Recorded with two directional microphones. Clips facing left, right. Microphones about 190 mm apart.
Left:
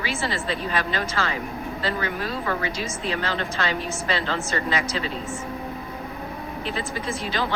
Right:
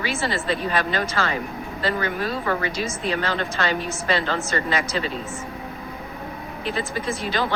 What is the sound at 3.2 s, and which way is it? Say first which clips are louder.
Speech: right 2 dB; 50° right (ahead or behind).